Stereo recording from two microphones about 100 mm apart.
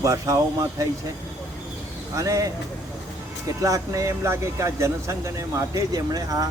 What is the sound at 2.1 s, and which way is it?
Speech, 35° right (ahead or behind).